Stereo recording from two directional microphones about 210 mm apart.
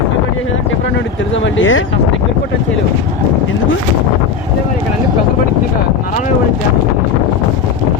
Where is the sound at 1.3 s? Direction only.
65° left (ahead or behind).